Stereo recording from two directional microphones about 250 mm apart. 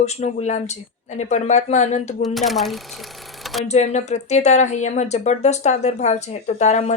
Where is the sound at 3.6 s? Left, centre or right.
Left.